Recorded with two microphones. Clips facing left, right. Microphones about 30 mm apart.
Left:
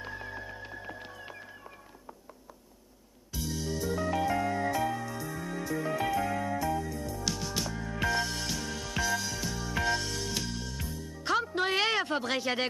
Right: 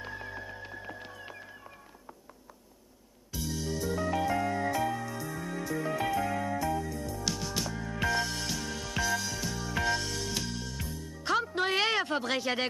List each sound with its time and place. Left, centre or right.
0.0 s music: centre
3.3 s music: centre